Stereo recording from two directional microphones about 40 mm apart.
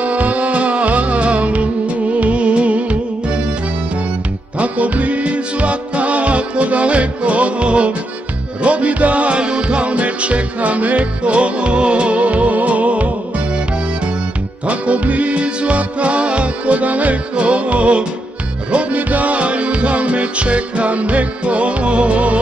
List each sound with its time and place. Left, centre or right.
0.0 s music: right
4.6 s music: right
14.7 s music: right